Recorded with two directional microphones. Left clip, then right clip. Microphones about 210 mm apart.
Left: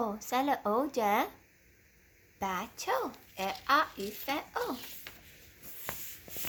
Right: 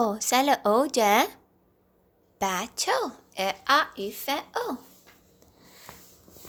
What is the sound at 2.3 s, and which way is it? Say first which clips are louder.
Speech: right 8 dB; 35° right (ahead or behind).